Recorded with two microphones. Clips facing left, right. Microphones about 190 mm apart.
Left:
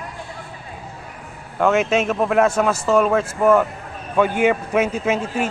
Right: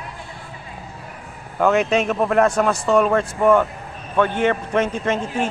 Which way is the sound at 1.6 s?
Centre (ahead or behind).